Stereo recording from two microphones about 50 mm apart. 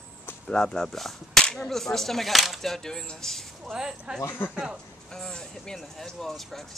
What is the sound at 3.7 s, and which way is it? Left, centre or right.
Speech, centre.